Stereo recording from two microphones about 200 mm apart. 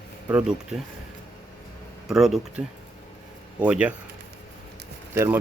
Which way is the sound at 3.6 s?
5° right (ahead or behind).